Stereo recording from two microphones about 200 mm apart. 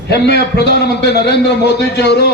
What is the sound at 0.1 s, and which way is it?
A man's voice, 55° left (ahead or behind).